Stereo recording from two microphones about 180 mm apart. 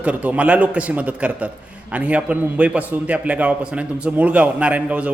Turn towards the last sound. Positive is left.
turn(degrees=-5)  # may be behind; listen again after turning